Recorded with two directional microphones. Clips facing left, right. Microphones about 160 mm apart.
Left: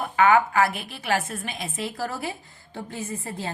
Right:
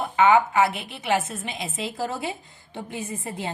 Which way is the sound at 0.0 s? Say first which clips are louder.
Right 1 dB; 25° right (ahead or behind).